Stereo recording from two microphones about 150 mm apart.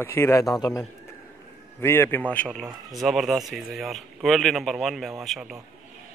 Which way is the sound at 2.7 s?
25° right (ahead or behind).